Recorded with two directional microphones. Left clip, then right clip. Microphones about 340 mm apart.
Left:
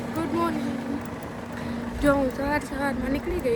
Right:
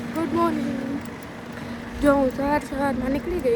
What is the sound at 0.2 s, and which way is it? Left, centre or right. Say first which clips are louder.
Boat: right 4 dB; centre.